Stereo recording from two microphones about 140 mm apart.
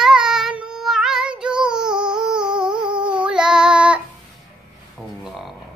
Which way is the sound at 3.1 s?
5° right (ahead or behind).